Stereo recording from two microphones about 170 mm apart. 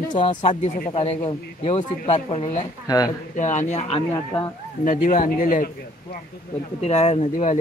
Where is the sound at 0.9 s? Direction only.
35° left (ahead or behind).